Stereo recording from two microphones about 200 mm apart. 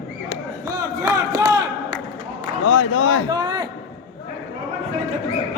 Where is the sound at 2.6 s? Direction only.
70° left (ahead or behind).